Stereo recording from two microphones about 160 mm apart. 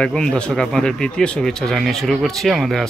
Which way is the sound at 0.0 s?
5° left (ahead or behind).